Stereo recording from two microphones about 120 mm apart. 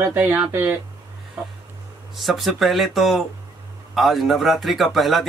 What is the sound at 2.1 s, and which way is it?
Speech, centre (ahead or behind).